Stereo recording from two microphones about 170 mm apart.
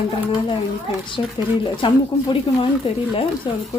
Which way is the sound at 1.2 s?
30° left (ahead or behind).